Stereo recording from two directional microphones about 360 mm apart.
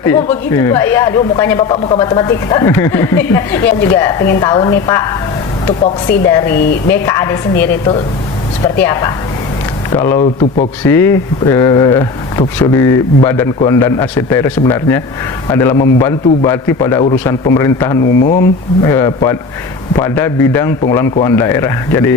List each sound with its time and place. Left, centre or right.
0.0 s a man's voice: centre
6.2 s a man's voice: centre
18.0 s speech: left
18.8 s a man's voice: centre